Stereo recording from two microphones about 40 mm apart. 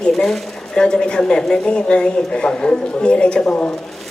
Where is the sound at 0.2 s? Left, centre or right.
Centre.